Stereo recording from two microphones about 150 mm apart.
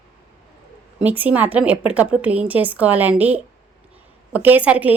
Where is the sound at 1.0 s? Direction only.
10° right (ahead or behind).